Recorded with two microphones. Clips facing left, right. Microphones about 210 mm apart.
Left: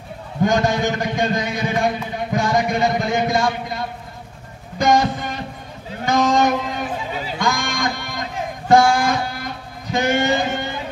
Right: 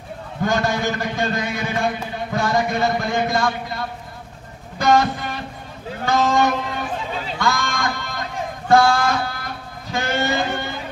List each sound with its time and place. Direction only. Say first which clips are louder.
0.4 s a man's voice: left 3 dB; 15° left (ahead or behind)
4.7 s music: even; 15° left (ahead or behind)
6.0 s a man's voice: left 1 dB; 15° left (ahead or behind)
7.3 s a sound: even; 15° left (ahead or behind)